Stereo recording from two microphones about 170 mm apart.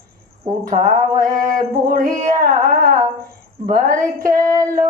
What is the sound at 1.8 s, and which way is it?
Speech, 55° right (ahead or behind).